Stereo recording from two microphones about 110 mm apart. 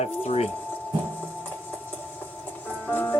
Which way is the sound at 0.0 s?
70° left (ahead or behind).